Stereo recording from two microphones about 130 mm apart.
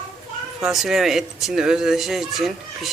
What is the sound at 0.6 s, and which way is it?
Speech, 5° right (ahead or behind).